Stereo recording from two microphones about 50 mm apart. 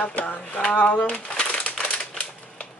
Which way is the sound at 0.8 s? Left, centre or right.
Left.